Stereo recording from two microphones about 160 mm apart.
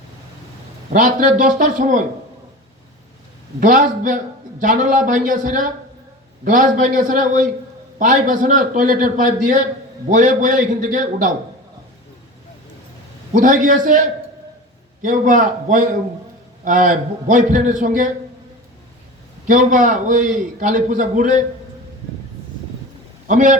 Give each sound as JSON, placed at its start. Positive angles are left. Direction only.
{"t": 0.9, "sound": "a man's voice", "side_deg": -55}
{"t": 3.6, "sound": "a man's voice", "side_deg": -55}
{"t": 13.3, "sound": "a man's voice", "side_deg": -55}
{"t": 15.0, "sound": "a man's voice", "side_deg": -55}
{"t": 19.5, "sound": "a man's voice", "side_deg": -55}
{"t": 23.2, "sound": "a man's voice", "side_deg": -55}